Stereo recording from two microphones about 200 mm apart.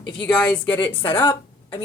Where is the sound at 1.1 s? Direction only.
10° left (ahead or behind).